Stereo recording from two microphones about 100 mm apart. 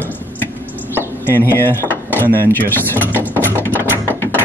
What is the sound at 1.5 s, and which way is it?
Drawer open or close, 20° left (ahead or behind).